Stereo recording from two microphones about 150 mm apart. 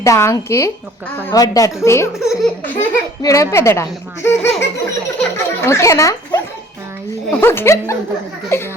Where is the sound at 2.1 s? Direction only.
Centre (ahead or behind).